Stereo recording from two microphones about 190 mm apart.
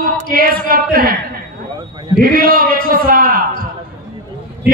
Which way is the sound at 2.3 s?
50° right (ahead or behind).